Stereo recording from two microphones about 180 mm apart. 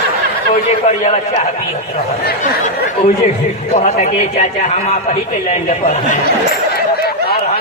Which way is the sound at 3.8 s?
40° left (ahead or behind).